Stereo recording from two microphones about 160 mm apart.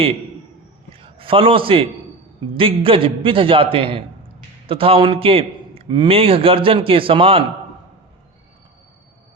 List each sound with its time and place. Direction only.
0.9 s a man's voice: 35° right (ahead or behind)